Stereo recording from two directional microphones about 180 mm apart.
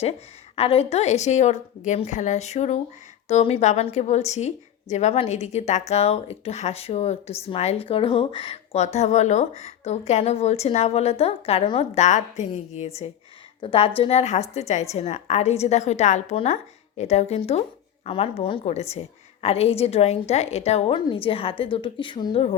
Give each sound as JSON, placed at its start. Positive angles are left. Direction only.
{"t": 0.5, "sound": "a woman's voice", "side_deg": 35}